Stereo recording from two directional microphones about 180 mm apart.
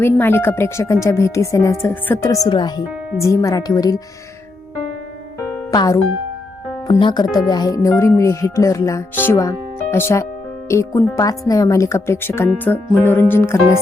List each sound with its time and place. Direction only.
0.0 s speech: 15° left (ahead or behind)
5.7 s speech: 20° left (ahead or behind)